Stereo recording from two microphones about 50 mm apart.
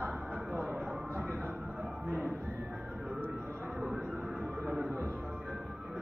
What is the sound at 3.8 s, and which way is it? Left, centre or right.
Music, centre.